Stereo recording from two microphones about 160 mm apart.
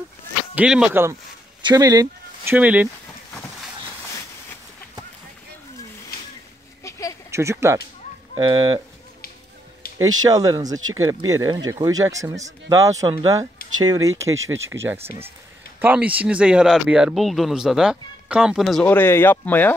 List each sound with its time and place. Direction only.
0.6 s speech: 5° right (ahead or behind)
1.6 s a sound: 25° right (ahead or behind)
2.5 s speech: 10° right (ahead or behind)
6.8 s a sound: 20° left (ahead or behind)
7.2 s speech: 15° right (ahead or behind)
8.4 s speech: 25° right (ahead or behind)
9.9 s speech: 25° right (ahead or behind); by 19.7 s 10° left (ahead or behind)